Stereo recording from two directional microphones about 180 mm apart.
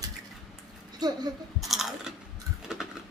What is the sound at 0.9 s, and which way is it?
Speech, 20° right (ahead or behind).